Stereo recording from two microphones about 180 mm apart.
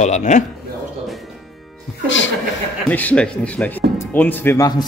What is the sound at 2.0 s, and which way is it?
Chuckle, 90° left.